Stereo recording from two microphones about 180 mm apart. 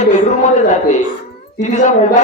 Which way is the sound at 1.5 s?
45° left (ahead or behind).